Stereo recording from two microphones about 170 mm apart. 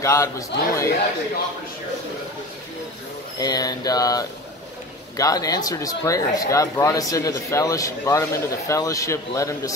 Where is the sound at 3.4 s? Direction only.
25° left (ahead or behind).